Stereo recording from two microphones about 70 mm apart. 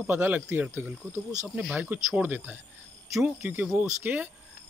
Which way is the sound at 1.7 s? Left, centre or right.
Right.